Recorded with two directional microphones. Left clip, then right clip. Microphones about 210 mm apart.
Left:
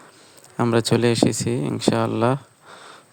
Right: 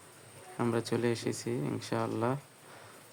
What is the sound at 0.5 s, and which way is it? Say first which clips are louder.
Speech: left 12 dB; 40° left (ahead or behind).